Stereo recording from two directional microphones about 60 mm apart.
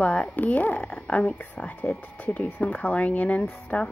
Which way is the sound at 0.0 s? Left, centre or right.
Left.